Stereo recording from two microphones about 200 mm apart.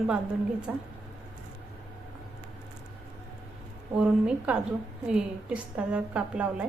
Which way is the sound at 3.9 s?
5° right (ahead or behind).